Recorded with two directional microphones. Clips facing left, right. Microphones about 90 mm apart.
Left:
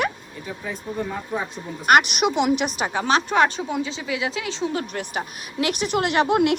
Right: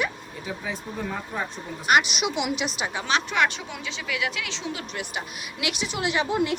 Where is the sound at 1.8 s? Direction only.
55° left (ahead or behind).